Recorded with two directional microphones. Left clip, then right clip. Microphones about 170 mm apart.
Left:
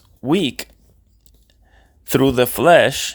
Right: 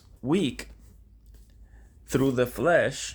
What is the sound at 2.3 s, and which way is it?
Speech, 55° left (ahead or behind).